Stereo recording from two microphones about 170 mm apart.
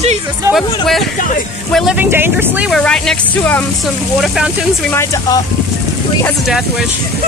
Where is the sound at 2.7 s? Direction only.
5° left (ahead or behind).